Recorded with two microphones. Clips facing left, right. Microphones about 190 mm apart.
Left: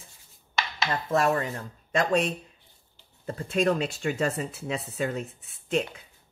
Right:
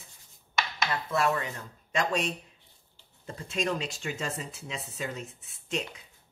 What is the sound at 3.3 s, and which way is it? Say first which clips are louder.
Speech: left 6 dB; 55° left (ahead or behind).